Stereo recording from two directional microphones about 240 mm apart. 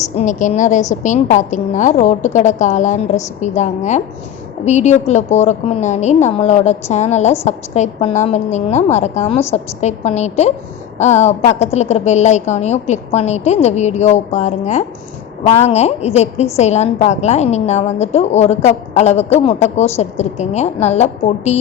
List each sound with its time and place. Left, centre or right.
0.2 s a woman's voice: left